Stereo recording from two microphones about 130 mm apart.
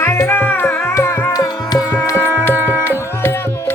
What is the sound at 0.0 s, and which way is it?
Music, 20° left (ahead or behind).